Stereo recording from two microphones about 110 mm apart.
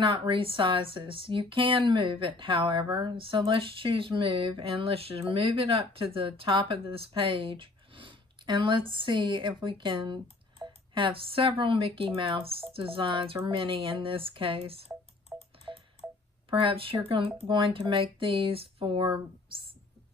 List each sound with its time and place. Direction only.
0.0 s speech: 55° right (ahead or behind)
15.3 s tick-tock: centre (ahead or behind)
16.0 s a sound: 10° right (ahead or behind)
16.4 s speech: 55° right (ahead or behind)